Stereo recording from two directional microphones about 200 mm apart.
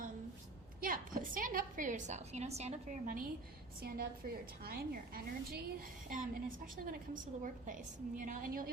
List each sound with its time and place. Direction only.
0.8 s a woman's voice: 45° right (ahead or behind)
3.8 s a woman's voice: 50° right (ahead or behind)